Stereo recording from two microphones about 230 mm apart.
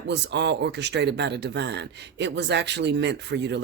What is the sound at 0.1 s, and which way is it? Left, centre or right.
Speech, right.